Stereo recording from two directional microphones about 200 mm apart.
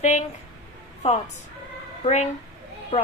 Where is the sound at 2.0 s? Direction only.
35° left (ahead or behind).